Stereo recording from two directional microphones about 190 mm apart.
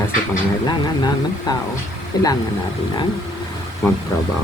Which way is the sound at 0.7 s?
20° left (ahead or behind).